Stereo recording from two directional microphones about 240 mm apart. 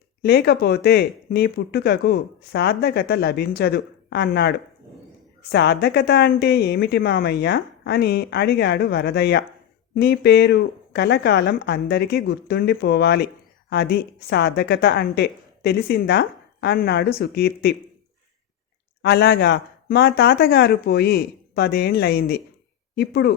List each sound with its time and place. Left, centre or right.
0.2 s speech: left
19.0 s speech: left